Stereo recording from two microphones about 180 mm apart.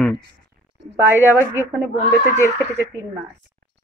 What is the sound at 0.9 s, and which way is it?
Speech, 15° right (ahead or behind).